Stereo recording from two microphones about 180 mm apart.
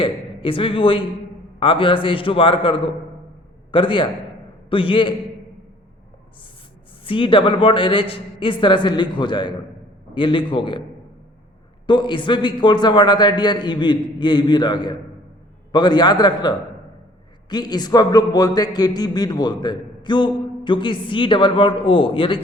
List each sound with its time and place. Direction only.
0.0 s a man's voice: 30° left (ahead or behind)
7.0 s a man's voice: 30° left (ahead or behind)
11.9 s a man's voice: 25° left (ahead or behind)